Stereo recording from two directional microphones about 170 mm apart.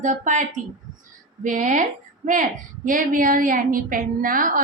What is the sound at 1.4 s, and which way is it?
A woman's voice, 45° right (ahead or behind).